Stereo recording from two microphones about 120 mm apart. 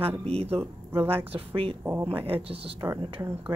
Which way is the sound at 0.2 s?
55° right (ahead or behind).